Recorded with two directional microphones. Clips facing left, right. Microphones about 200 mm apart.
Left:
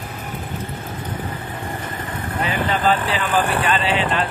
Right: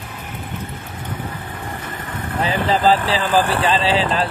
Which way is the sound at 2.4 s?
30° right (ahead or behind).